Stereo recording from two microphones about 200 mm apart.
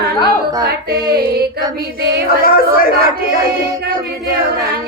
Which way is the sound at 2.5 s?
45° left (ahead or behind).